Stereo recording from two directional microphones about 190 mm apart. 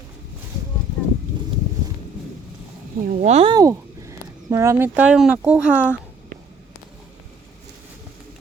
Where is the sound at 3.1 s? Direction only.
40° right (ahead or behind).